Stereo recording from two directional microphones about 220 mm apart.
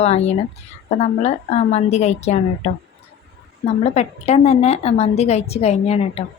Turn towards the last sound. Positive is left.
turn(degrees=30)  # may be behind; listen again after turning